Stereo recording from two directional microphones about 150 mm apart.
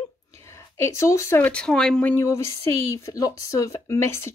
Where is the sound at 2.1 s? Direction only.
20° left (ahead or behind).